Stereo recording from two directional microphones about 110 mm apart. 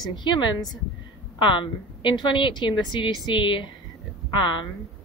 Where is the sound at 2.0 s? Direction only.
45° left (ahead or behind).